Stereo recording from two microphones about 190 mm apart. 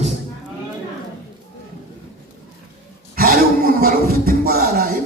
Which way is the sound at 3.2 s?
50° right (ahead or behind).